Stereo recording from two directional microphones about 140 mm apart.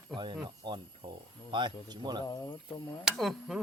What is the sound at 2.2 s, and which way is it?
Speech, 25° left (ahead or behind).